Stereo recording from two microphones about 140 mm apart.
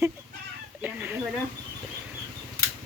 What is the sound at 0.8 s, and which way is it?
Chicken, 10° right (ahead or behind).